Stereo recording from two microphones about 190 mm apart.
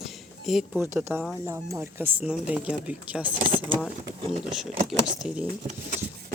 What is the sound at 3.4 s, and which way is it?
Speech, 30° right (ahead or behind).